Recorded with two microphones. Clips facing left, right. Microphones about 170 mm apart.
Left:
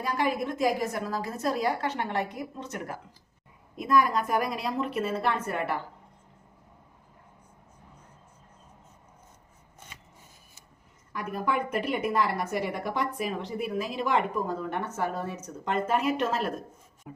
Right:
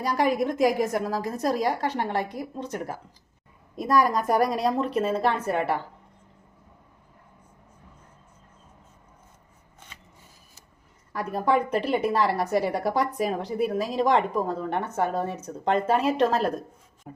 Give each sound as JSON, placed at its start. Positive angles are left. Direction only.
{"t": 0.0, "sound": "a woman's voice", "side_deg": -40}
{"t": 11.1, "sound": "a woman's voice", "side_deg": -35}